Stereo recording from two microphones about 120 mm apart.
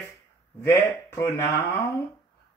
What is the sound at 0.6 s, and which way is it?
Speech, 20° left (ahead or behind).